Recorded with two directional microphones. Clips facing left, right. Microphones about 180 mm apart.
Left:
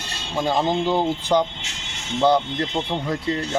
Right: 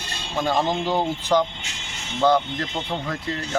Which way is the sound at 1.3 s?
20° left (ahead or behind).